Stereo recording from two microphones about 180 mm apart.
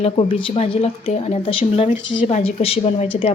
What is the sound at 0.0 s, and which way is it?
Speech, 30° left (ahead or behind).